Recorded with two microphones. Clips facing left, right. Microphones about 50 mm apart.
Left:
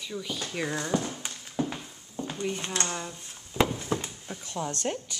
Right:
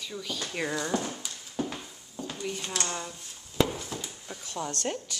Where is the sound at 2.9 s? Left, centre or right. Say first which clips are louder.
Left 1 dB; centre.